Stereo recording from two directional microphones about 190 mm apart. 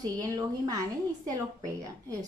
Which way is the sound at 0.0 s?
20° right (ahead or behind).